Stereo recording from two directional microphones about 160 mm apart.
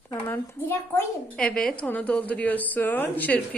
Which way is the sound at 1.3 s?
5° left (ahead or behind).